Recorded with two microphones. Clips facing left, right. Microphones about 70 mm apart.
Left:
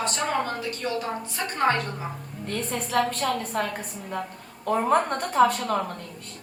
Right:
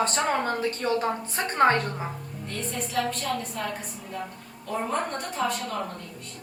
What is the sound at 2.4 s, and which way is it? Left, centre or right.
A woman's voice, left.